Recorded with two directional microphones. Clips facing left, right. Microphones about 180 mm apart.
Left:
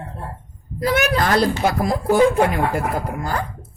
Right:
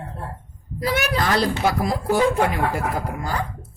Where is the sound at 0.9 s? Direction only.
50° left (ahead or behind).